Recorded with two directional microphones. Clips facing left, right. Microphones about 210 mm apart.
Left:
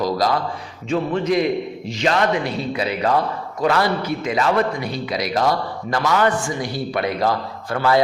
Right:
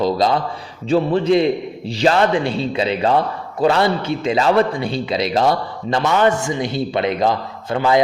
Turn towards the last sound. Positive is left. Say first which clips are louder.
# right 2 dB
turn(degrees=-20)  # may be behind; listen again after turning